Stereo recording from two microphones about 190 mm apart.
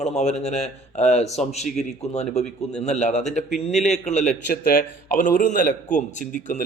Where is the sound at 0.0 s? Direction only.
35° left (ahead or behind).